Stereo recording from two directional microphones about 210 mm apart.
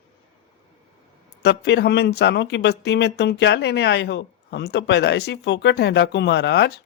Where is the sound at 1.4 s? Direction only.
55° left (ahead or behind).